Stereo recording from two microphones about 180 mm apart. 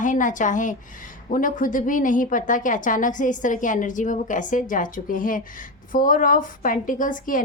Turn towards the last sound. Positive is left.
turn(degrees=50)  # may be behind; listen again after turning